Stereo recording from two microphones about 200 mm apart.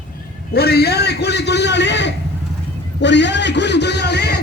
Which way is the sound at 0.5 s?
50° left (ahead or behind).